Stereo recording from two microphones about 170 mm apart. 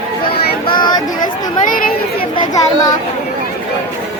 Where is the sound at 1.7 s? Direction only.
55° left (ahead or behind).